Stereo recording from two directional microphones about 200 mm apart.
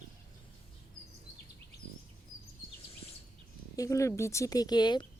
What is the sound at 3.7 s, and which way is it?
Speech, 15° left (ahead or behind).